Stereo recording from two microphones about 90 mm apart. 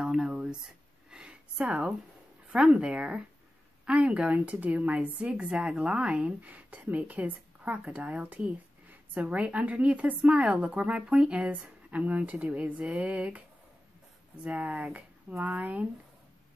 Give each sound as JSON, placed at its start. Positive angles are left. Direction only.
{"t": 0.0, "sound": "a sound", "side_deg": -5}
{"t": 2.4, "sound": "a woman's voice", "side_deg": -10}
{"t": 14.4, "sound": "a woman's voice", "side_deg": -10}